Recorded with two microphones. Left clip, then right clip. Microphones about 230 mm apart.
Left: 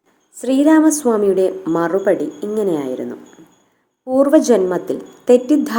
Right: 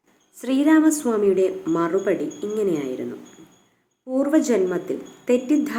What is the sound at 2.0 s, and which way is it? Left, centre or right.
A woman's voice, centre.